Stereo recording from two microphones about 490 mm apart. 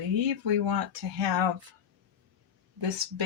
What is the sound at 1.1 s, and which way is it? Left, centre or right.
Speech, right.